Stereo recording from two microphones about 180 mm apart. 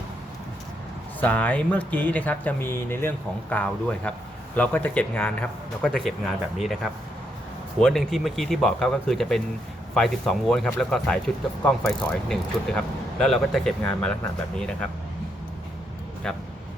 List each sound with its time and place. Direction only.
1.2 s a man's voice: 10° left (ahead or behind)
16.2 s speech: 5° left (ahead or behind)